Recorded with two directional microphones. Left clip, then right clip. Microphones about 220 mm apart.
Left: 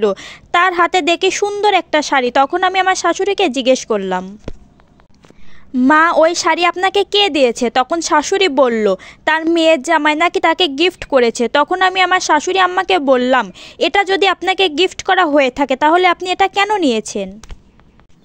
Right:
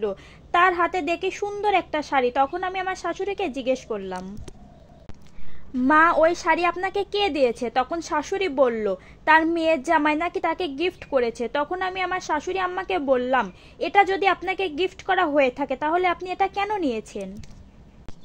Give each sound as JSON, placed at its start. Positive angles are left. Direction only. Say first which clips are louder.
{"t": 0.0, "sound": "a woman's voice", "louder": "left 12 dB", "side_deg": 40}
{"t": 5.8, "sound": "a woman's voice", "louder": "left 7 dB", "side_deg": 35}